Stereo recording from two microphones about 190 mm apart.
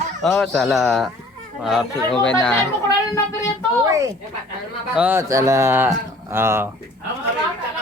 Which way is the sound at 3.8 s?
15° right (ahead or behind).